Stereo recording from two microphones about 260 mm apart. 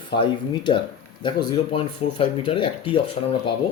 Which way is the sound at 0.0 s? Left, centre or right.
Centre.